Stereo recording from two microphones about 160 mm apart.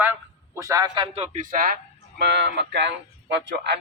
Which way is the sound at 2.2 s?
90° right.